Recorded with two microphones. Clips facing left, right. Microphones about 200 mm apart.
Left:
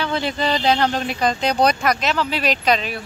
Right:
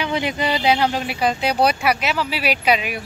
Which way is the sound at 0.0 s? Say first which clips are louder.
Even; 15° right (ahead or behind).